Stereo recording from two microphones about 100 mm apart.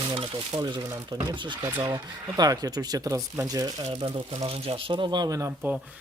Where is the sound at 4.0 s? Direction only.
75° right (ahead or behind); by 5.4 s 45° right (ahead or behind).